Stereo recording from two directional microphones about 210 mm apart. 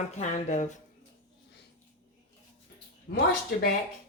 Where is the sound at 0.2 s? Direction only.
35° left (ahead or behind).